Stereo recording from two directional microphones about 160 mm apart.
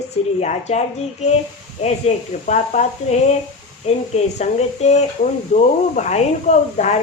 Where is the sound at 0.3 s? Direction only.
45° left (ahead or behind).